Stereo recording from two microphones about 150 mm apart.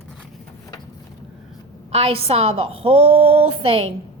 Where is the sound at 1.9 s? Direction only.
40° right (ahead or behind).